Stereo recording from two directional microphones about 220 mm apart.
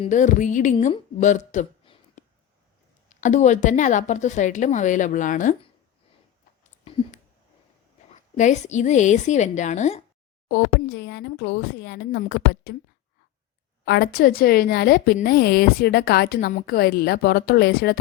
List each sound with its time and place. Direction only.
0.0 s a woman's voice: 35° left (ahead or behind)
6.8 s a sound: 25° left (ahead or behind)
8.1 s a woman's voice: 35° left (ahead or behind)
10.5 s a woman's voice: 50° left (ahead or behind)
13.8 s a woman's voice: 50° left (ahead or behind)